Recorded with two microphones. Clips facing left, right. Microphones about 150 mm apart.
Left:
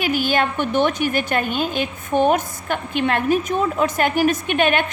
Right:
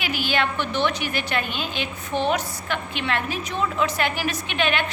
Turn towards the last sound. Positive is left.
turn(degrees=50)  # may be behind; listen again after turning